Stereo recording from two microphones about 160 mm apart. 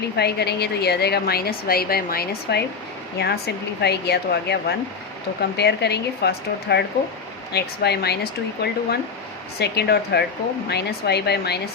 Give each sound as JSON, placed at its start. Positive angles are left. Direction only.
{"t": 0.2, "sound": "a woman's voice", "side_deg": 90}